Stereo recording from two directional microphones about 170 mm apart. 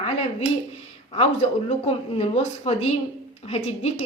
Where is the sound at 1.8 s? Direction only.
35° left (ahead or behind).